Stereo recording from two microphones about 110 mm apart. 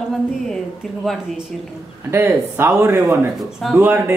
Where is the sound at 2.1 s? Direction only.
20° right (ahead or behind).